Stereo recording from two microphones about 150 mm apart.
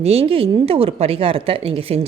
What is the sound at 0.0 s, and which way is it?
Speech, 40° right (ahead or behind).